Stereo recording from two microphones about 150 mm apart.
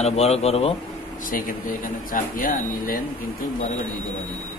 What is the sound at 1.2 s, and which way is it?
Speech, 65° left (ahead or behind).